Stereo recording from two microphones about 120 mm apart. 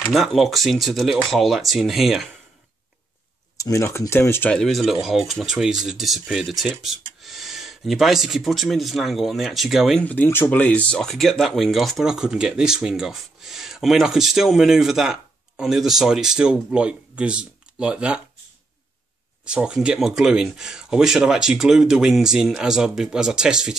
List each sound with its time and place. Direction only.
0.1 s speech: centre (ahead or behind)
3.5 s speech: 25° left (ahead or behind)
4.5 s speech: 5° left (ahead or behind)
10.0 s speech: 15° left (ahead or behind); by 18.2 s 10° right (ahead or behind)
19.4 s speech: 5° right (ahead or behind)